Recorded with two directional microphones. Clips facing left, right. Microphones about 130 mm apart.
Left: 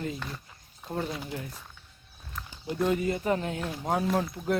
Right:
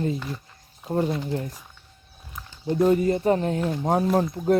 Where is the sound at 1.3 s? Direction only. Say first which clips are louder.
Right 8 dB; 40° right (ahead or behind).